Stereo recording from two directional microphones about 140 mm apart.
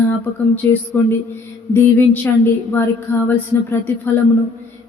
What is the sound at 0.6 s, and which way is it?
A woman's voice, 15° left (ahead or behind).